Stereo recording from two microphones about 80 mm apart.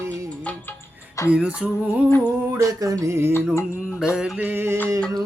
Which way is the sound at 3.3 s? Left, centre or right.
Left.